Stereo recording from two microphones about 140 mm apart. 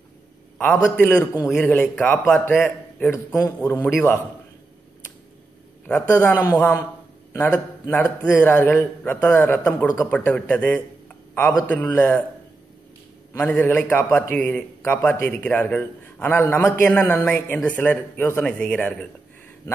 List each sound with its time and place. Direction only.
0.9 s speech: 10° left (ahead or behind)
3.3 s a man's voice: 20° left (ahead or behind)
5.9 s a man's voice: 10° left (ahead or behind)
13.3 s speech: 10° left (ahead or behind)